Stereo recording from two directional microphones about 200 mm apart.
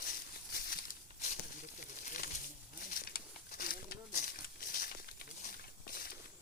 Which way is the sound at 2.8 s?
45° left (ahead or behind).